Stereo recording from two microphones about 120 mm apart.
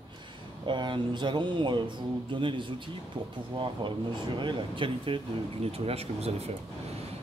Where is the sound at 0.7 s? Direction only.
40° right (ahead or behind).